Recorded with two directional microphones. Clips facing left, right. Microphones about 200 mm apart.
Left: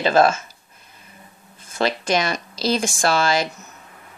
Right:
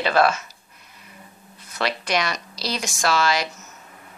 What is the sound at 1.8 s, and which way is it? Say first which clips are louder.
Speech: left 4 dB; 45° left (ahead or behind).